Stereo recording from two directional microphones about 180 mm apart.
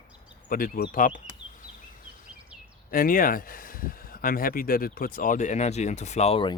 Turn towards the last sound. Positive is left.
turn(degrees=30)  # may be behind; listen again after turning